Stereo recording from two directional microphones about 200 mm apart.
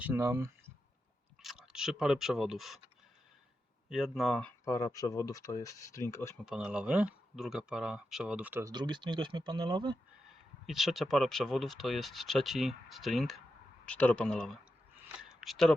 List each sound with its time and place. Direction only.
0.0 s speech: 10° right (ahead or behind)
1.4 s speech: centre (ahead or behind)
3.8 s speech: centre (ahead or behind)
6.3 s speech: centre (ahead or behind)
8.7 s speech: 20° right (ahead or behind)
10.7 s speech: centre (ahead or behind)
15.3 s a sound: centre (ahead or behind)